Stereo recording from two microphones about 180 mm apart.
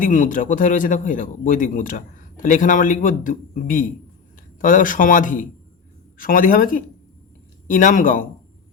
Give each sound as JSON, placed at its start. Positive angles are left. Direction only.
{"t": 0.0, "sound": "speech", "side_deg": 45}